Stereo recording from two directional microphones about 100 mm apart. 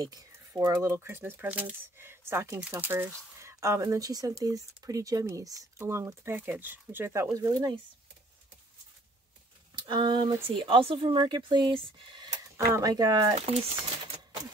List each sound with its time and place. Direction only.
0.6 s speech: 40° right (ahead or behind)
0.9 s speech: 25° right (ahead or behind)
7.2 s speech: 40° right (ahead or behind)
9.8 s speech: 50° right (ahead or behind)
10.6 s speech: 60° right (ahead or behind)
12.5 s speech: 30° right (ahead or behind)
12.9 s speech: 40° right (ahead or behind)
13.5 s speech: 80° right